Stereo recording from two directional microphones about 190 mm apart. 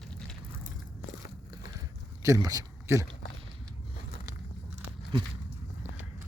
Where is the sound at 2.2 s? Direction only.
20° right (ahead or behind).